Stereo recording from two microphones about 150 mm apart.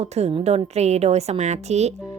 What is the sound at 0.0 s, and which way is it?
A woman's voice, 45° right (ahead or behind).